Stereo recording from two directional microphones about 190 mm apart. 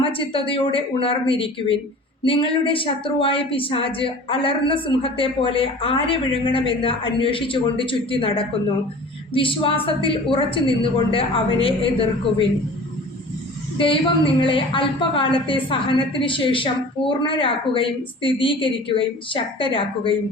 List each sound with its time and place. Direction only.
0.0 s a woman's voice: 30° left (ahead or behind)
13.7 s a woman's voice: 25° left (ahead or behind)